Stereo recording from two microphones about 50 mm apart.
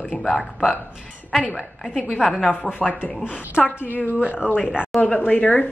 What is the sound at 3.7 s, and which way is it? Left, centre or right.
Speech, left.